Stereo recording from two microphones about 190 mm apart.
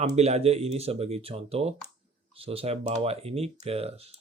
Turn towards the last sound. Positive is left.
turn(degrees=-30)  # may be behind; listen again after turning